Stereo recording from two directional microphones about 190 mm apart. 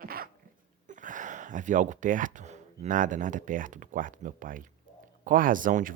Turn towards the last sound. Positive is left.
turn(degrees=-45)  # may be behind; listen again after turning